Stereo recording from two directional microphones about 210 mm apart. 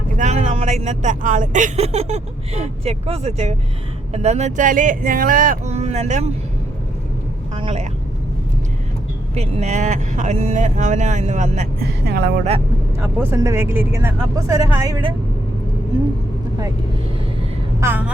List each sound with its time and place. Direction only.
0.2 s speech: 35° right (ahead or behind)
7.5 s speech: 25° right (ahead or behind)
9.3 s speech: 30° right (ahead or behind)
11.8 s speech: 50° right (ahead or behind)
13.0 s speech: 10° right (ahead or behind)
17.7 s speech: 10° right (ahead or behind)